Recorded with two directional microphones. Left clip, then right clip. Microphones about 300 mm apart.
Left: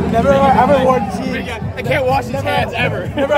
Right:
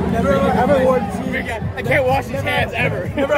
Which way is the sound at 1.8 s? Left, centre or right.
Centre.